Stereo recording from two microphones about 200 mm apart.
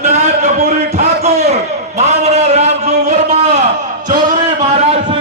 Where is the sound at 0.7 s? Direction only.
35° right (ahead or behind).